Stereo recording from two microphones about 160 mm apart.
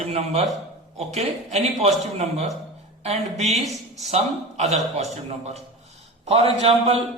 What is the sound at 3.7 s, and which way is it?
Speech, centre (ahead or behind).